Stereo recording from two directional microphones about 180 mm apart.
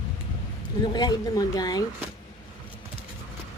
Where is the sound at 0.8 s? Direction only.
20° left (ahead or behind).